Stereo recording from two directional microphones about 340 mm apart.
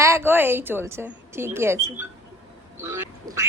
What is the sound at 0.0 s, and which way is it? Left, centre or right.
A woman's voice, centre.